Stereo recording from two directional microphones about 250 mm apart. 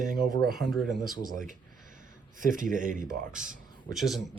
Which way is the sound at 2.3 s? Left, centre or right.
Right.